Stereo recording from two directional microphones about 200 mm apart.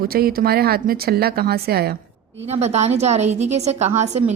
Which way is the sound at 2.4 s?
35° right (ahead or behind).